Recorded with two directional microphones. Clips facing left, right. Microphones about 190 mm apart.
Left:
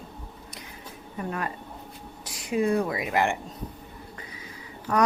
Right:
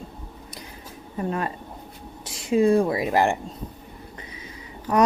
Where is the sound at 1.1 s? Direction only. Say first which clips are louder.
Right 5 dB; 30° right (ahead or behind).